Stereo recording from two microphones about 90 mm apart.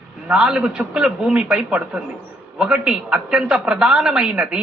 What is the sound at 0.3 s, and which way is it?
A man's voice, 10° right (ahead or behind).